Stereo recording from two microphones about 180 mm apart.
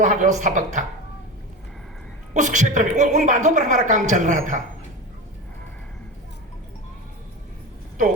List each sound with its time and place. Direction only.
0.0 s a woman's voice: 45° right (ahead or behind)
2.3 s a woman's voice: 40° right (ahead or behind)